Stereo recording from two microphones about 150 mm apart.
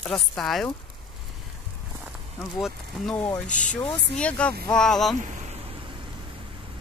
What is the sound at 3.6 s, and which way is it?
Speech, 5° left (ahead or behind).